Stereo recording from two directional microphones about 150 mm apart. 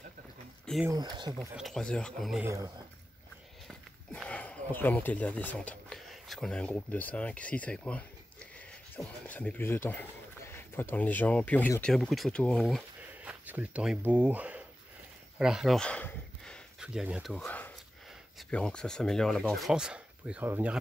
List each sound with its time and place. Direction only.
0.8 s speech: 25° right (ahead or behind)
1.5 s speech: centre (ahead or behind)
2.4 s speech: 20° right (ahead or behind)
3.6 s speech: 5° left (ahead or behind)
11.9 s speech: centre (ahead or behind)
13.2 s a sound: 10° right (ahead or behind); by 16.6 s 10° left (ahead or behind)
16.8 s speech: 5° right (ahead or behind)
17.5 s sniff: 10° left (ahead or behind)
18.5 s speech: 5° left (ahead or behind); by 20.7 s 10° right (ahead or behind)